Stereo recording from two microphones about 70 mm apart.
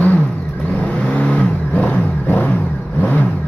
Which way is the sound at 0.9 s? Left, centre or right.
Centre.